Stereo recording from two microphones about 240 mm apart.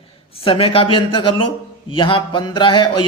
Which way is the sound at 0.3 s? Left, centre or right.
Left.